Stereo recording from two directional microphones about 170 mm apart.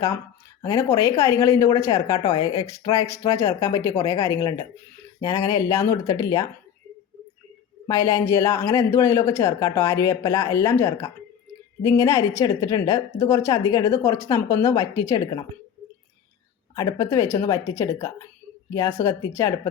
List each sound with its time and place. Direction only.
0.6 s a woman's voice: 15° left (ahead or behind)
7.9 s a woman's voice: 15° left (ahead or behind)
16.7 s a woman's voice: 20° left (ahead or behind)